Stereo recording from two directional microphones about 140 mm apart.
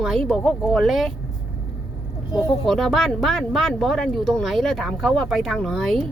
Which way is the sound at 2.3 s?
30° left (ahead or behind).